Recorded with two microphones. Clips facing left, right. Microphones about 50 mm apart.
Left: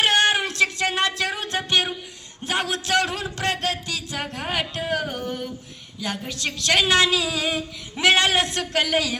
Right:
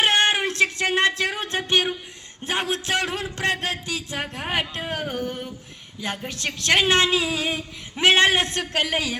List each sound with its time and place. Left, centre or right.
0.0 s music: right
2.4 s speech: right